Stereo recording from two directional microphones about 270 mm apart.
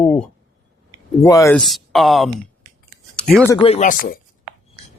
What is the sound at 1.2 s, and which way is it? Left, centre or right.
Speech, centre.